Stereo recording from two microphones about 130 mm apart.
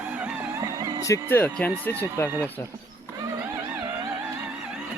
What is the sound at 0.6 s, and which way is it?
Music, 30° right (ahead or behind).